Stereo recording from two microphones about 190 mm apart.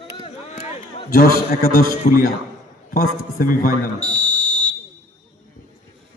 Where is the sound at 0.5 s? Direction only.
35° left (ahead or behind).